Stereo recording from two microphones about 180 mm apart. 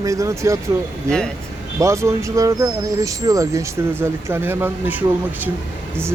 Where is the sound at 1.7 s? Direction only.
15° right (ahead or behind).